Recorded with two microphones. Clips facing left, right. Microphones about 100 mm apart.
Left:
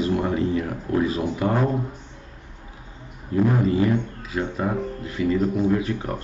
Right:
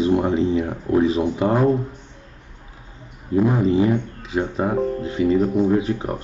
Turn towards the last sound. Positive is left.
turn(degrees=-20)  # may be behind; listen again after turning